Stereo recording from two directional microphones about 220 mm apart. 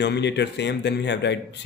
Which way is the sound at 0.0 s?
50° left (ahead or behind).